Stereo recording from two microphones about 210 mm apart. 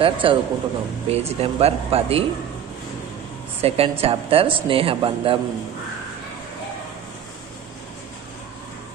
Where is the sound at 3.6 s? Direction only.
30° right (ahead or behind).